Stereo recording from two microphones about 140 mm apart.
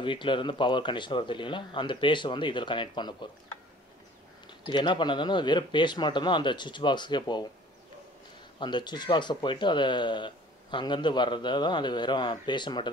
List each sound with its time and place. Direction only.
0.0 s speech: 35° left (ahead or behind)
4.5 s speech: 35° left (ahead or behind)
8.5 s speech: 30° left (ahead or behind)